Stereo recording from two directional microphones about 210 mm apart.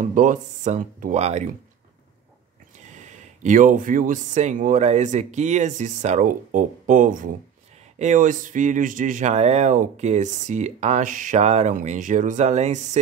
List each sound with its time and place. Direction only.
0.0 s speech: 40° right (ahead or behind)
2.9 s speech: 35° right (ahead or behind)